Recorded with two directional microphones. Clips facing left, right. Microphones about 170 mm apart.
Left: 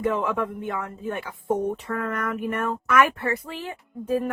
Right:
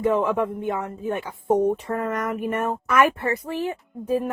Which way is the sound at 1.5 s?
45° right (ahead or behind).